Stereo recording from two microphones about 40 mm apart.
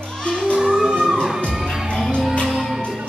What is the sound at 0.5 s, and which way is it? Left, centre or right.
Music, centre.